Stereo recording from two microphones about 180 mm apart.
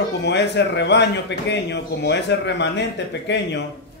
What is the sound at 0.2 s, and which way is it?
A man's voice, 70° left (ahead or behind).